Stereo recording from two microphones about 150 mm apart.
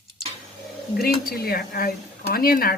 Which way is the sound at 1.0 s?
90° left.